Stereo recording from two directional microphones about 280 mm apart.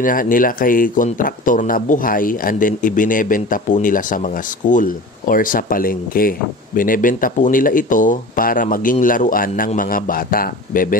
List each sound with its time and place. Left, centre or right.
0.0 s speech: left